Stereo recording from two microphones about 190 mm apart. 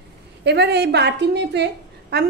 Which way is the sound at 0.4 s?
60° right (ahead or behind).